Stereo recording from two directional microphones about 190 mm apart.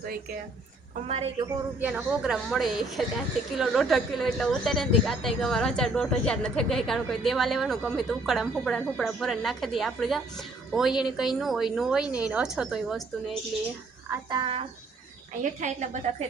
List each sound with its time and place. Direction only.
0.0 s speech: 50° right (ahead or behind)
1.0 s a woman's voice: 30° right (ahead or behind)
1.8 s a woman's voice: 5° right (ahead or behind)
14.3 s speech: 25° right (ahead or behind)
15.4 s a woman's voice: 40° right (ahead or behind)